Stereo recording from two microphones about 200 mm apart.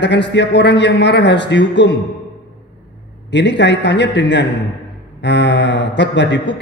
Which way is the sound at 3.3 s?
60° left (ahead or behind).